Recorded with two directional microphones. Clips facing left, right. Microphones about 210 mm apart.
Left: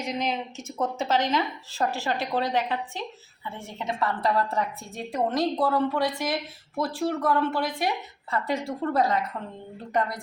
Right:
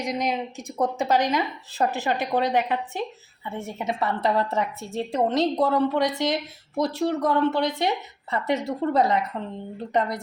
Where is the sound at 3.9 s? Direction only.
25° right (ahead or behind).